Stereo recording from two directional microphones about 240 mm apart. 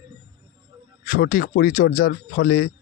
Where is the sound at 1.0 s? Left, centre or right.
Left.